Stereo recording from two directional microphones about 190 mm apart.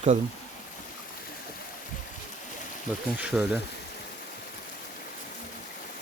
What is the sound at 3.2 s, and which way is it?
Speech, 5° right (ahead or behind).